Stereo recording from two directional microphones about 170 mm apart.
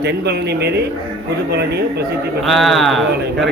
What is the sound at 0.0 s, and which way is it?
Speech, 75° right (ahead or behind).